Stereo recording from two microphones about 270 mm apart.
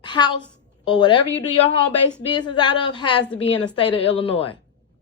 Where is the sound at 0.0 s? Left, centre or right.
Centre.